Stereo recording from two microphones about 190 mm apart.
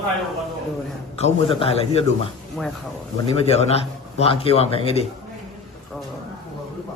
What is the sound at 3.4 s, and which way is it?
A man's voice, 35° left (ahead or behind).